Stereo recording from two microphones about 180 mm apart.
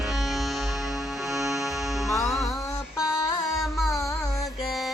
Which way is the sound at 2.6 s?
20° left (ahead or behind).